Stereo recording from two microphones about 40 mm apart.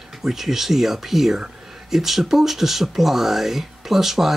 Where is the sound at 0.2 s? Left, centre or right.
Centre.